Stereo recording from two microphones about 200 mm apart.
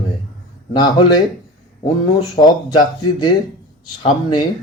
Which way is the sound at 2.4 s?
20° left (ahead or behind).